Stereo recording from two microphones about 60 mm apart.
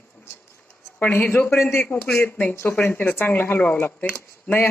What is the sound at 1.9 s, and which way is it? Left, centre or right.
Speech, centre.